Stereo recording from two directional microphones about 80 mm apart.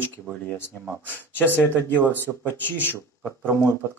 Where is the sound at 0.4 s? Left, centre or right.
Left.